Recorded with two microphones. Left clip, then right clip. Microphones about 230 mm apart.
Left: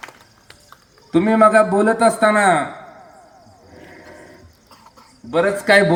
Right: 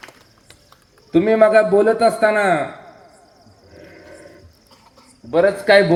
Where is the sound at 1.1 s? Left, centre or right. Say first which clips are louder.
Even; left.